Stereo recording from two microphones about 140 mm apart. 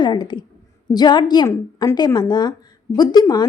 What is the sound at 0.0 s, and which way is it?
A woman's voice, 30° left (ahead or behind).